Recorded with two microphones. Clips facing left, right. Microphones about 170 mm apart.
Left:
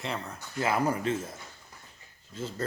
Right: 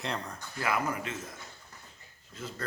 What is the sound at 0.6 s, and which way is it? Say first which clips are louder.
Speech: left 4 dB; 30° left (ahead or behind).